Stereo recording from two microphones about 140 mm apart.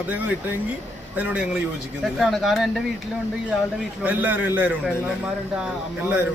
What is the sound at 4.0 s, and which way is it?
A man's voice, 10° right (ahead or behind).